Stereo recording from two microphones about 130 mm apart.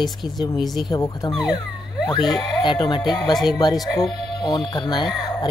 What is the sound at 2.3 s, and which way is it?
Speech, 35° left (ahead or behind).